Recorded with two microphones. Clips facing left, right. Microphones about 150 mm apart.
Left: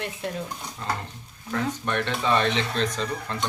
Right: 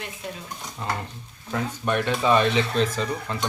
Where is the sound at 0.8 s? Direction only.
10° right (ahead or behind).